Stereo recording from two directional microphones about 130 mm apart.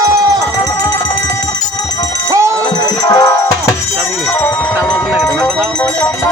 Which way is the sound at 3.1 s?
30° left (ahead or behind).